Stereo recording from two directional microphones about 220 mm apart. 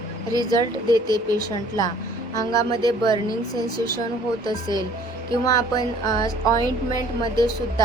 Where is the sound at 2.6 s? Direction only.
20° right (ahead or behind).